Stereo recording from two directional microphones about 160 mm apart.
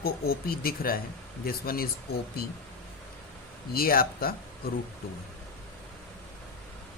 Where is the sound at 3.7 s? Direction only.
65° left (ahead or behind).